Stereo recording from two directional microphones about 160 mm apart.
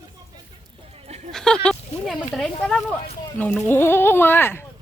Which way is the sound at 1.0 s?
45° right (ahead or behind).